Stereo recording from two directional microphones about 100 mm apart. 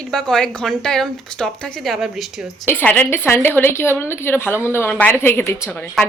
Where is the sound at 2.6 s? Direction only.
20° left (ahead or behind).